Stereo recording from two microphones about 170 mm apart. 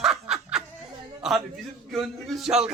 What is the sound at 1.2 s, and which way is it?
A man's voice, centre (ahead or behind).